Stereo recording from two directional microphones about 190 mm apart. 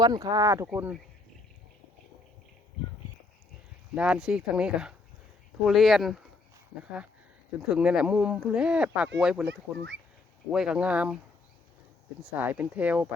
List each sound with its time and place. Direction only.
0.0 s speech: 20° right (ahead or behind)
3.9 s speech: 5° right (ahead or behind)
7.7 s speech: 5° right (ahead or behind)
12.2 s speech: 10° right (ahead or behind)